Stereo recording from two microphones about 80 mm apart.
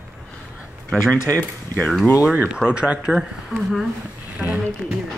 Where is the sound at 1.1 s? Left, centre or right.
Left.